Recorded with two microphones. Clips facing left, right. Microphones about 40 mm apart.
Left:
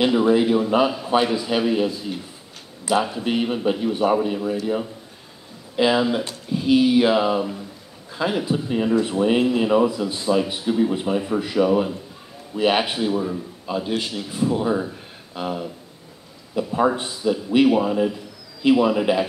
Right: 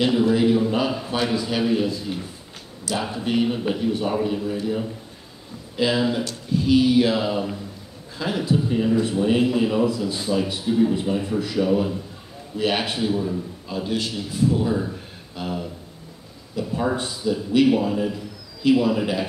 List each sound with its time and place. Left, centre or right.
0.2 s a man's voice: centre
3.2 s a man's voice: centre
5.8 s speech: left
9.4 s a man's voice: centre
9.7 s a man's voice: left